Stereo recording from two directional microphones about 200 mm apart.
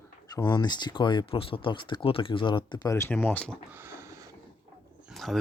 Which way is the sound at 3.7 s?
10° right (ahead or behind).